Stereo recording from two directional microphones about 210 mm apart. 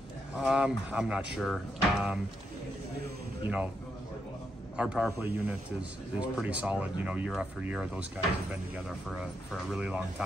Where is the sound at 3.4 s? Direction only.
10° right (ahead or behind).